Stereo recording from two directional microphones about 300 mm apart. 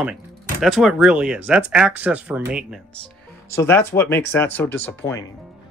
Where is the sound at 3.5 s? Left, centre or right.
Centre.